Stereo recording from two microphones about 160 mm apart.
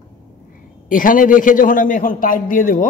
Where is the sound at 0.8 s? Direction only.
55° left (ahead or behind).